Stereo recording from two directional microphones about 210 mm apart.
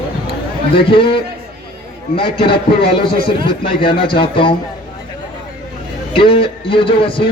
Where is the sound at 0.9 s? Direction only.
25° left (ahead or behind).